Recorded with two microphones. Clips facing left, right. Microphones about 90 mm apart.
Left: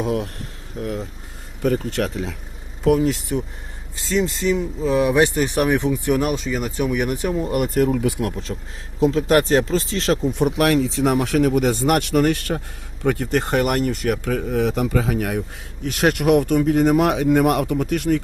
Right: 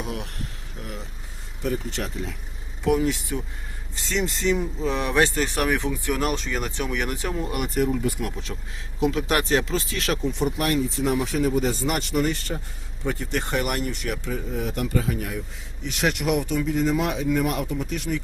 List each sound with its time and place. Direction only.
0.0 s speech: 40° left (ahead or behind)
1.6 s speech: 55° left (ahead or behind); by 2.3 s 80° left
3.0 s speech: 35° left (ahead or behind)
4.1 s speech: centre (ahead or behind)
6.3 s speech: 5° left (ahead or behind)
7.4 s speech: 35° left (ahead or behind)
7.9 s speech: 70° left (ahead or behind)
8.2 s speech: 35° left (ahead or behind)
10.3 s speech: 80° left; by 14.2 s 45° left (ahead or behind)
14.3 s speech: 70° left (ahead or behind); by 15.4 s 90° left
15.8 s speech: 50° left (ahead or behind)